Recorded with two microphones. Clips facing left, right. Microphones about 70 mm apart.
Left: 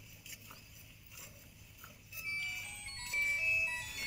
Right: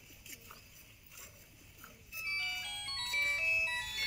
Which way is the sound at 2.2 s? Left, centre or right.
Right.